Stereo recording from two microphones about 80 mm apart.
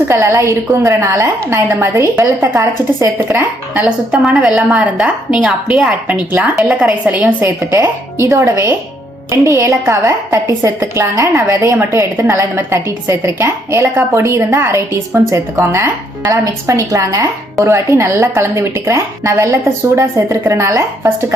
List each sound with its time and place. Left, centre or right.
0.1 s a woman's voice: right
4.2 s a woman's voice: centre
6.6 s a woman's voice: centre
7.4 s a woman's voice: right